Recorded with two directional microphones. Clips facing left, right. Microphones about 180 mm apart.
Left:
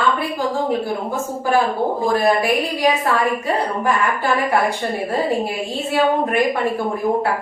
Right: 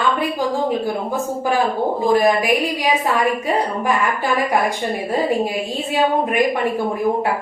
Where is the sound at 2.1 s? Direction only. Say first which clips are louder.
Right 1 dB; 15° right (ahead or behind).